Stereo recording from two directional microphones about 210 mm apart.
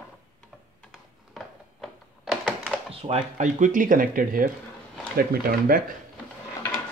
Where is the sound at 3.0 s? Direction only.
35° right (ahead or behind).